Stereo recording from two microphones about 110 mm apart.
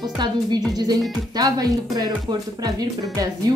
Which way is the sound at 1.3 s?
35° right (ahead or behind).